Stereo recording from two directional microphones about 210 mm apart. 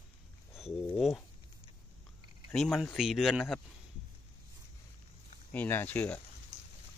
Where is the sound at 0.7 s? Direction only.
Centre (ahead or behind).